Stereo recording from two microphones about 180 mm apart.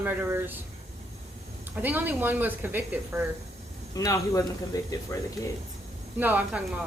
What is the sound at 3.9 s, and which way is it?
Speech, 20° left (ahead or behind).